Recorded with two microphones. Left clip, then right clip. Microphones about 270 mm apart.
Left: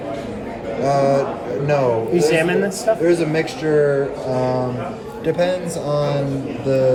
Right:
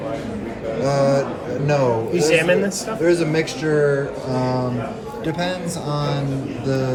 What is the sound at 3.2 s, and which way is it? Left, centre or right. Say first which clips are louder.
Speech: left 1 dB; centre.